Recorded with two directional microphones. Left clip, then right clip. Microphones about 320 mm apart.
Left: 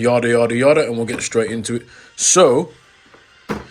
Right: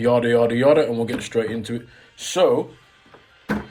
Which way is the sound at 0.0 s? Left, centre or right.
Centre.